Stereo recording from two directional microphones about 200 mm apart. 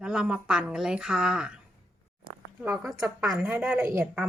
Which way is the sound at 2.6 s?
10° right (ahead or behind).